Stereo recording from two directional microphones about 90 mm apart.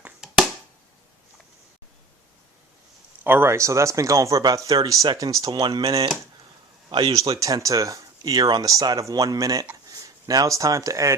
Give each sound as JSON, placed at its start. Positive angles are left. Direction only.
{"t": 0.2, "sound": "a sound", "side_deg": -5}
{"t": 3.2, "sound": "speech", "side_deg": -25}
{"t": 5.8, "sound": "speech", "side_deg": -40}
{"t": 7.3, "sound": "speech", "side_deg": -40}